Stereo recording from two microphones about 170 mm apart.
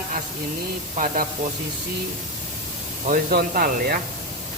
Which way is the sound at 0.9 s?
50° right (ahead or behind).